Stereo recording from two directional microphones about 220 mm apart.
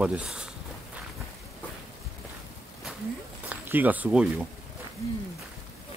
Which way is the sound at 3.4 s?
10° right (ahead or behind).